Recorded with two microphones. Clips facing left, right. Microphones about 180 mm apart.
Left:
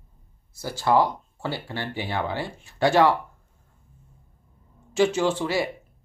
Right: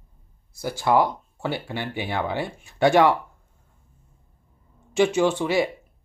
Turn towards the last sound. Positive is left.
turn(degrees=-20)  # may be behind; listen again after turning